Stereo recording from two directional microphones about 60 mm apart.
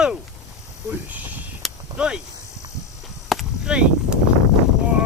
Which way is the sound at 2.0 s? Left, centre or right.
Centre.